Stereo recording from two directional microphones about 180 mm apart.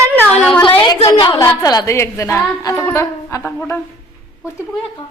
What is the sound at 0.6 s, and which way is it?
A woman's voice, 25° left (ahead or behind).